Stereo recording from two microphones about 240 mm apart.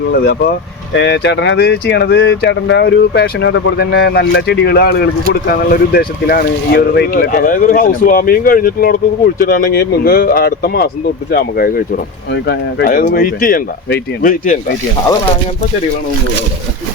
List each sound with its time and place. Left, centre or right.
0.1 s speech: left